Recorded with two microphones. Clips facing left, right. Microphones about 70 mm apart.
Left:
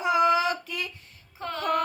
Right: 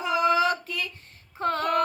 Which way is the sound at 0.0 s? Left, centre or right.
Left.